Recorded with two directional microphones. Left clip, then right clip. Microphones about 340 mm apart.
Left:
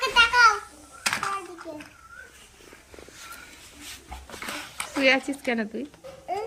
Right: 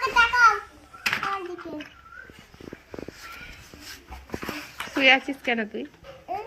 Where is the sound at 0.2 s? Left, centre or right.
Right.